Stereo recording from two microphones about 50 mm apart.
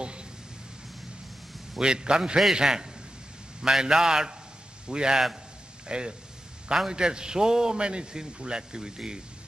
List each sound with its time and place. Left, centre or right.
1.8 s a man's voice: centre